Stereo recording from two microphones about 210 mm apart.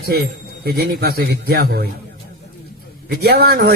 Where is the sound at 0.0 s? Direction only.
50° right (ahead or behind).